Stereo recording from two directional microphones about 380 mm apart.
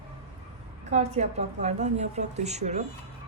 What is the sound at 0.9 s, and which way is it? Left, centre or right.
A woman's voice, centre.